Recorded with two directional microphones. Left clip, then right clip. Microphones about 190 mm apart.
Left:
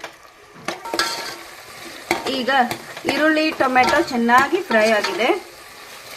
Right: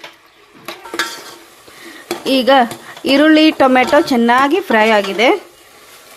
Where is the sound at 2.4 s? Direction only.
60° right (ahead or behind).